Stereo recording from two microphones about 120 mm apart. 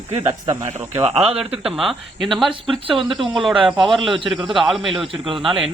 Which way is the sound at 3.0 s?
45° right (ahead or behind).